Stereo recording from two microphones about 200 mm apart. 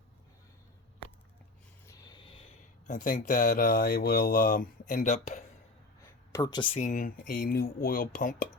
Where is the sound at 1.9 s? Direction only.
20° left (ahead or behind).